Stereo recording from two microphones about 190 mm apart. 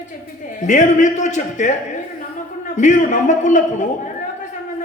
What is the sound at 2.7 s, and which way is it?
A man's voice, 40° left (ahead or behind).